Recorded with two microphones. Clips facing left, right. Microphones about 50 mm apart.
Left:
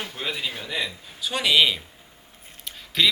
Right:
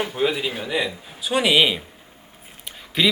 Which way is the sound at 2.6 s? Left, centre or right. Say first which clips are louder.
Right 1 dB; centre.